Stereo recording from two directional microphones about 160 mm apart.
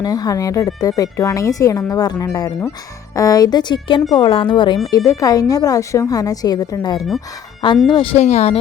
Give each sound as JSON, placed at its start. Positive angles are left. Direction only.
{"t": 0.0, "sound": "speech", "side_deg": 25}